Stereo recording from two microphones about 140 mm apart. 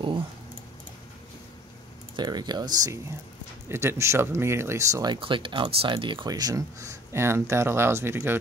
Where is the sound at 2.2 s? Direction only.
30° right (ahead or behind).